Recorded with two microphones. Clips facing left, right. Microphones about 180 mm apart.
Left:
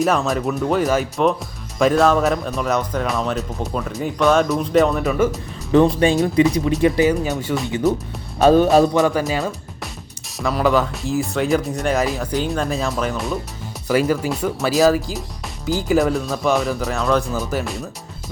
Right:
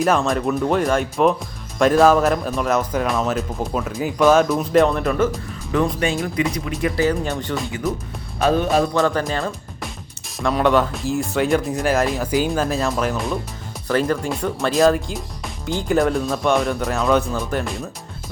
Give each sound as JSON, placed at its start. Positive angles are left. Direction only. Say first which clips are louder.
{"t": 0.0, "sound": "speech", "louder": "even", "side_deg": 0}
{"t": 5.7, "sound": "speech", "louder": "left 6 dB", "side_deg": 30}
{"t": 7.3, "sound": "speech", "louder": "left 2 dB", "side_deg": 5}
{"t": 8.4, "sound": "music", "louder": "left 5 dB", "side_deg": 35}
{"t": 8.9, "sound": "speech", "louder": "left 2 dB", "side_deg": 15}